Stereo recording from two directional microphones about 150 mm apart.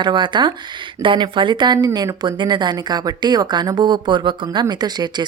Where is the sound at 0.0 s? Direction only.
30° right (ahead or behind).